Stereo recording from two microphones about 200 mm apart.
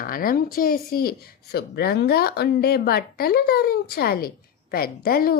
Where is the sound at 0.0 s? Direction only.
45° left (ahead or behind).